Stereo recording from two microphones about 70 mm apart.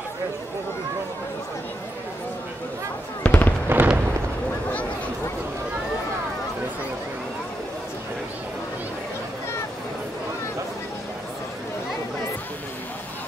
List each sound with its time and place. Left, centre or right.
3.3 s fireworks: left
3.6 s fireworks: right